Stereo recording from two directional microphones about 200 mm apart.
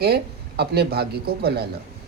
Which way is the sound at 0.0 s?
50° right (ahead or behind).